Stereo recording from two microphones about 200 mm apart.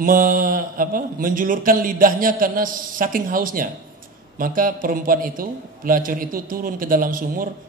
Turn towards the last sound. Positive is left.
turn(degrees=-45)  # may be behind; listen again after turning